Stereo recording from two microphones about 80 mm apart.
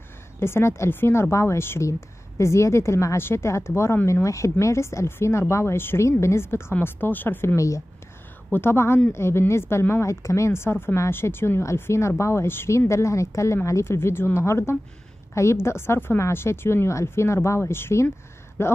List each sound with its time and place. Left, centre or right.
0.4 s speech: left
7.5 s speech: left
8.5 s speech: left